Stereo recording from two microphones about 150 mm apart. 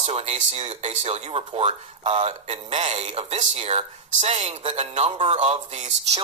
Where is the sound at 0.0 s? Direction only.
45° right (ahead or behind).